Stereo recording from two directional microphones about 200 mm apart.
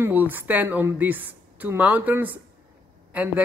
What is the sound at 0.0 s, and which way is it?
A man's voice, 10° right (ahead or behind).